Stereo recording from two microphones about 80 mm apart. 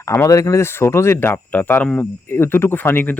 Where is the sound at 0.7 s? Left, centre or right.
Left.